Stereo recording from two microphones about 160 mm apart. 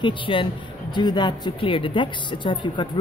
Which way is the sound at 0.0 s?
30° left (ahead or behind).